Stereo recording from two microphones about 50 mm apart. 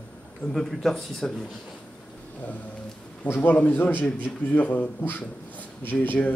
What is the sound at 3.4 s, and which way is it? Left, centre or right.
A man's voice, left.